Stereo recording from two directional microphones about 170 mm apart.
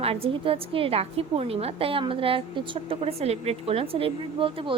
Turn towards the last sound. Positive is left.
turn(degrees=-30)  # may be behind; listen again after turning